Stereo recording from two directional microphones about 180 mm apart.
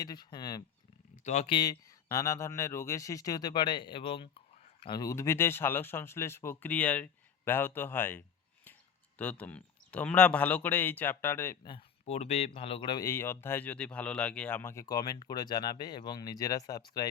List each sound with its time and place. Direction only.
0.0 s speech: 20° left (ahead or behind)
1.2 s speech: 40° left (ahead or behind)
1.5 s speech: 25° left (ahead or behind)
11.6 s speech: 30° left (ahead or behind)